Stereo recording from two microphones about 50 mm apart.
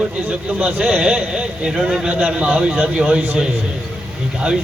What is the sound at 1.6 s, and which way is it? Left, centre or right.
A man's voice, centre.